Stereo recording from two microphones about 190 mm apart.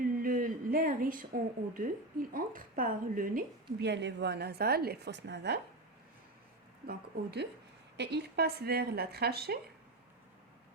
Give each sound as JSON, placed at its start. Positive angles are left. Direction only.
{"t": 0.0, "sound": "a sound", "side_deg": -45}
{"t": 2.3, "sound": "a woman's voice", "side_deg": -45}
{"t": 6.8, "sound": "a woman's voice", "side_deg": -55}